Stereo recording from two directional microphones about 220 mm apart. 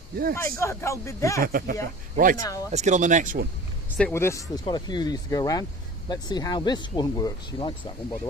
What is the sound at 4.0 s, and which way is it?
Speech, 5° left (ahead or behind).